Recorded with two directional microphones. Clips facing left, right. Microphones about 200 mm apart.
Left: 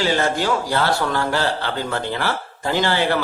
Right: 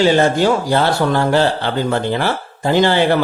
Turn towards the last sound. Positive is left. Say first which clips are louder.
# right 6 dB
turn(degrees=-20)  # may be behind; listen again after turning